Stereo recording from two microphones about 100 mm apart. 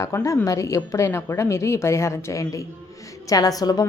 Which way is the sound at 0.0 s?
30° left (ahead or behind).